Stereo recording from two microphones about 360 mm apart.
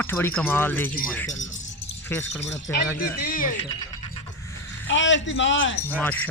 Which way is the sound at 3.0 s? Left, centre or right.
Left.